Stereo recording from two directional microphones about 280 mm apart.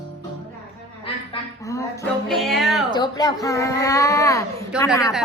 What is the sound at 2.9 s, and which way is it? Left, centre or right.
A child's voice, centre.